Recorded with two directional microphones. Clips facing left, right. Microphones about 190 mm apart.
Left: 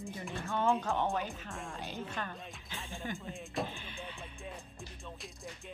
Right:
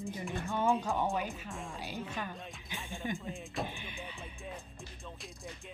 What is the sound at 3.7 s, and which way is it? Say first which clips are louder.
Speech: right 1 dB; 15° right (ahead or behind).